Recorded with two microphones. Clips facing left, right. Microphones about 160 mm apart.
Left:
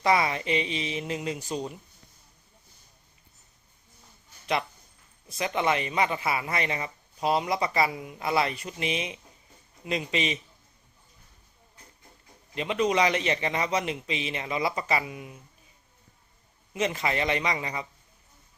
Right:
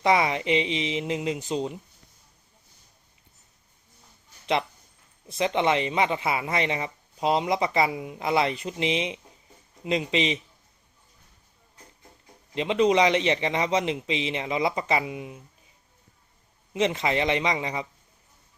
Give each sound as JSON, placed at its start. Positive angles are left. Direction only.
{"t": 0.0, "sound": "speech", "side_deg": -20}
{"t": 5.3, "sound": "speech", "side_deg": -25}
{"t": 12.5, "sound": "speech", "side_deg": -25}
{"t": 16.7, "sound": "speech", "side_deg": -25}